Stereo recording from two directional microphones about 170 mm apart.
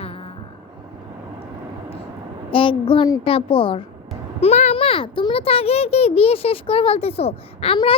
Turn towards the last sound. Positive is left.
turn(degrees=35)  # may be behind; listen again after turning